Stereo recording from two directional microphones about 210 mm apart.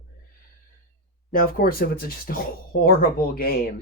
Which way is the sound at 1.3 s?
45° left (ahead or behind).